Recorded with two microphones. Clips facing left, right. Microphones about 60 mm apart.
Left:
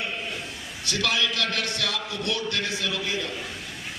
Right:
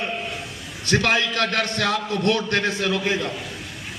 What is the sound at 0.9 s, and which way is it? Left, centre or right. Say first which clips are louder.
A man's voice: right 6 dB; right.